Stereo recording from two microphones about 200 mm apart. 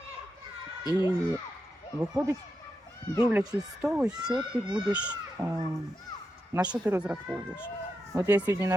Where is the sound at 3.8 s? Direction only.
5° right (ahead or behind).